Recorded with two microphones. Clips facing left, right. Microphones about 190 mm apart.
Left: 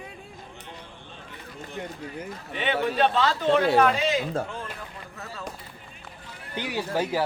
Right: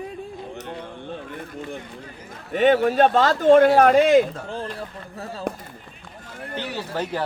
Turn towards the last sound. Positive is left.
turn(degrees=10)  # may be behind; listen again after turning